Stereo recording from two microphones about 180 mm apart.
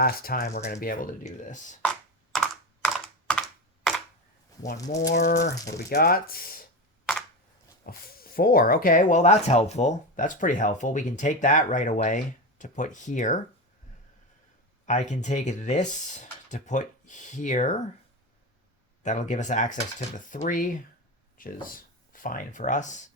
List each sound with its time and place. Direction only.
0.0 s speech: 55° left (ahead or behind)
2.3 s computer keyboard: 5° left (ahead or behind)
5.1 s speech: 65° left (ahead or behind)
7.0 s a sound: centre (ahead or behind)
7.9 s speech: 55° left (ahead or behind)
14.8 s speech: 40° left (ahead or behind)
19.0 s speech: 40° left (ahead or behind)